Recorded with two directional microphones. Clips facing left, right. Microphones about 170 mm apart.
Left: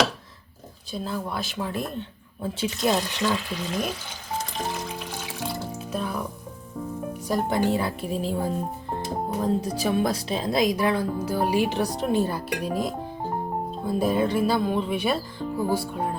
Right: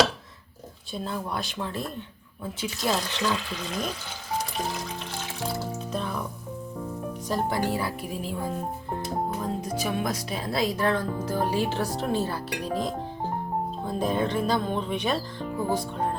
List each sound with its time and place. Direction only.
0.9 s speech: centre (ahead or behind)
1.5 s speech: 15° left (ahead or behind)
2.4 s a woman's voice: 30° left (ahead or behind)
3.2 s speech: centre (ahead or behind)
5.9 s music: 5° left (ahead or behind)
7.3 s a woman's voice: 20° left (ahead or behind)
9.4 s speech: 35° left (ahead or behind); by 16.0 s 5° left (ahead or behind)